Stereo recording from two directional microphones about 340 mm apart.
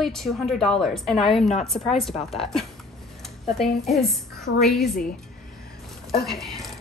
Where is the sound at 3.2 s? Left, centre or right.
Centre.